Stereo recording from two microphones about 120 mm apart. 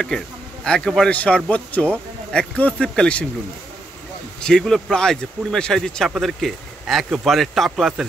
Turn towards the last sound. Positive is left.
turn(degrees=0)  # may be behind; listen again after turning